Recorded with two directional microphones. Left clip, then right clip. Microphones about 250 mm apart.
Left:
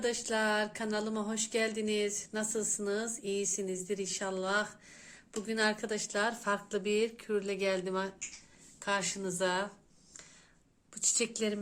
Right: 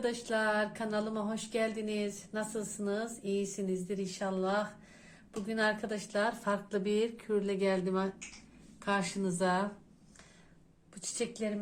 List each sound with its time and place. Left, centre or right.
0.0 s speech: left
10.9 s speech: left